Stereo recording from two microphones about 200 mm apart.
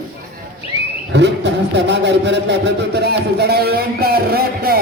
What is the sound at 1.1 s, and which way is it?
A man's voice, 60° right (ahead or behind).